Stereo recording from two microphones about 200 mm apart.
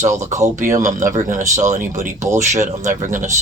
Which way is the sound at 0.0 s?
35° right (ahead or behind).